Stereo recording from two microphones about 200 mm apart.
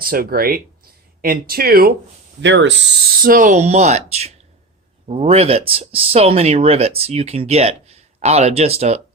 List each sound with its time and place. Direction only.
0.0 s speech: 45° right (ahead or behind)
2.4 s speech: 65° right (ahead or behind)
3.2 s speech: 40° right (ahead or behind)